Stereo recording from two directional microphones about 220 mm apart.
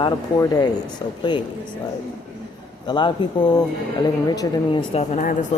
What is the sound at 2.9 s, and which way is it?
Speech, 20° left (ahead or behind).